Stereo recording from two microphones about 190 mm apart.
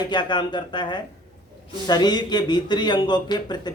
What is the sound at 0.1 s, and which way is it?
Speech, 25° left (ahead or behind).